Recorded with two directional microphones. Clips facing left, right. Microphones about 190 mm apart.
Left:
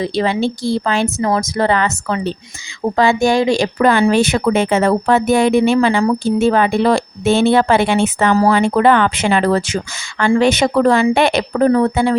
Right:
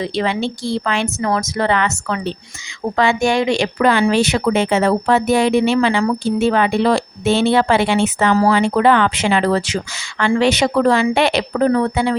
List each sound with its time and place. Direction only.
0.0 s speech: 35° left (ahead or behind)